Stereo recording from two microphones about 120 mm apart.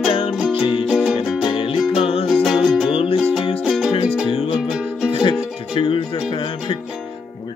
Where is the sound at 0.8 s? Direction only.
5° right (ahead or behind).